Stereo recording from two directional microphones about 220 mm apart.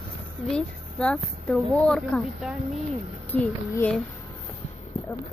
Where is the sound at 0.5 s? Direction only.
5° left (ahead or behind).